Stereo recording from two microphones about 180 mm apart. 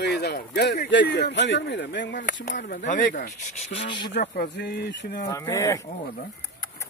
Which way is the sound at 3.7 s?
25° left (ahead or behind).